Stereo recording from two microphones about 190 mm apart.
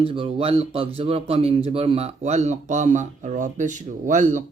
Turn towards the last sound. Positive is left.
turn(degrees=-40)  # may be behind; listen again after turning